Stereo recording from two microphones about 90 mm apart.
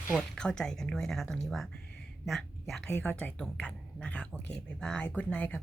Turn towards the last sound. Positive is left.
turn(degrees=20)  # may be behind; listen again after turning